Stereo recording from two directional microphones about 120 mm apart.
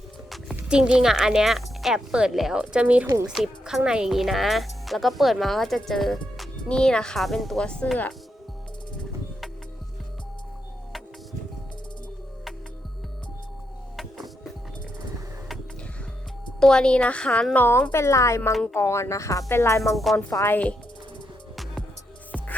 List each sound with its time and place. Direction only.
0.5 s speech: 10° right (ahead or behind); by 8.1 s 10° left (ahead or behind)
13.9 s music: centre (ahead or behind)
16.6 s a woman's voice: 5° left (ahead or behind)
21.5 s music: centre (ahead or behind)